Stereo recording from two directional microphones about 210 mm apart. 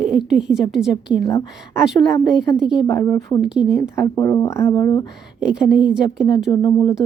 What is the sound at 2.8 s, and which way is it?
Speech, 10° left (ahead or behind).